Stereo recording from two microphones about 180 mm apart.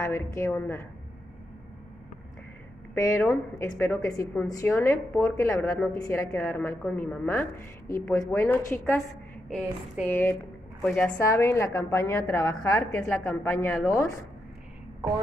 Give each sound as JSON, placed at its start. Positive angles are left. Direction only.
{"t": 0.0, "sound": "a woman's voice", "side_deg": 15}
{"t": 2.9, "sound": "a woman's voice", "side_deg": 15}